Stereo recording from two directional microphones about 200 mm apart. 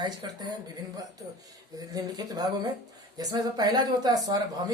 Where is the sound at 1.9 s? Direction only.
20° right (ahead or behind).